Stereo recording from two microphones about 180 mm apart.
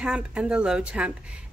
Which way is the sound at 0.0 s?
5° right (ahead or behind).